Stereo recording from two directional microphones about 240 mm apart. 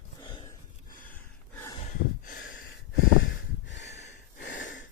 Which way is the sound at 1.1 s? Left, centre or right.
Centre.